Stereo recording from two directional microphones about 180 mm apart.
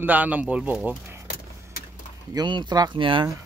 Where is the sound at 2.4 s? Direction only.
25° right (ahead or behind).